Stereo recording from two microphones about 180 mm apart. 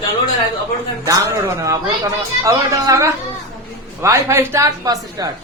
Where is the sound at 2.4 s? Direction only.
15° right (ahead or behind).